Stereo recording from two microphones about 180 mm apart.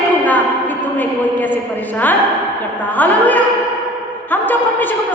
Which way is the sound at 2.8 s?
10° left (ahead or behind).